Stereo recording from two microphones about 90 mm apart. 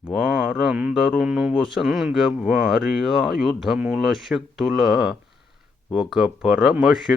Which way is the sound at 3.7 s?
15° right (ahead or behind).